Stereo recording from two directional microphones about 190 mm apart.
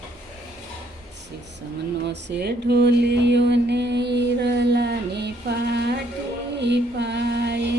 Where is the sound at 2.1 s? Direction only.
65° right (ahead or behind).